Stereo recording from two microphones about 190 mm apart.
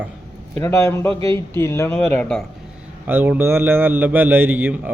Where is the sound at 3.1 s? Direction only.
10° right (ahead or behind).